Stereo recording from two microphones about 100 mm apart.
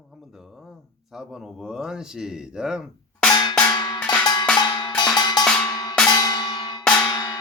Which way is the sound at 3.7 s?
50° left (ahead or behind).